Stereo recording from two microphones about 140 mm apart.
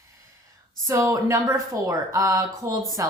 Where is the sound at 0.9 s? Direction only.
20° right (ahead or behind).